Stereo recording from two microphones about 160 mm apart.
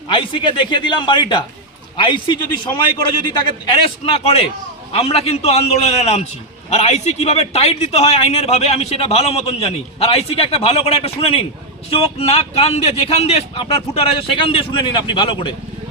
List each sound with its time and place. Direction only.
0.1 s a man's voice: 30° left (ahead or behind)
4.1 s a man's voice: 40° left (ahead or behind)